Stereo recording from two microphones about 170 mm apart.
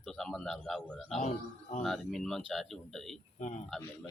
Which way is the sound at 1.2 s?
40° left (ahead or behind).